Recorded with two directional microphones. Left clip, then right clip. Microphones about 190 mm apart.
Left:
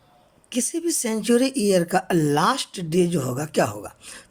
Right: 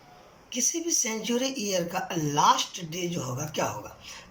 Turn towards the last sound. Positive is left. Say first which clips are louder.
# left 3 dB
turn(degrees=50)  # may be behind; listen again after turning